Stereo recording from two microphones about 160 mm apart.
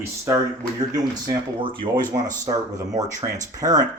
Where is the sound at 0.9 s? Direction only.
25° right (ahead or behind).